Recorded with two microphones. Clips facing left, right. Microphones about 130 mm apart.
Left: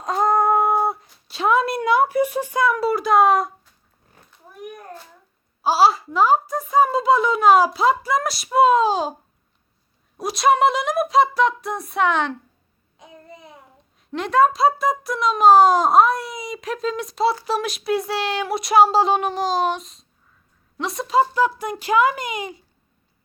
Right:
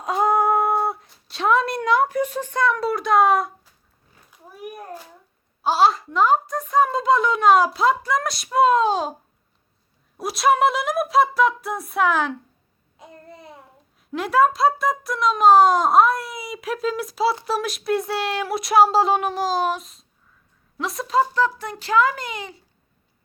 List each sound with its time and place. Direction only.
0.0 s a sound: 5° right (ahead or behind)
5.6 s speech: 5° left (ahead or behind)
10.2 s speech: centre (ahead or behind); by 22.6 s 15° left (ahead or behind)